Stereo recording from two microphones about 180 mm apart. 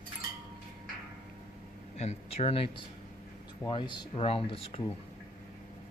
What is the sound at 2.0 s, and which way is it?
Speech, 35° left (ahead or behind).